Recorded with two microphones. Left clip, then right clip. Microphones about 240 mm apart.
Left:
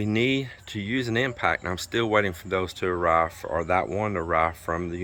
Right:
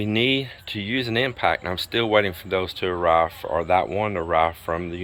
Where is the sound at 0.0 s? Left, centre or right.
Centre.